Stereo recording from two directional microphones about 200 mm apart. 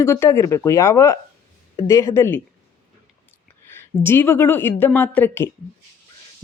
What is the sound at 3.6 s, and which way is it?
Speech, 10° left (ahead or behind).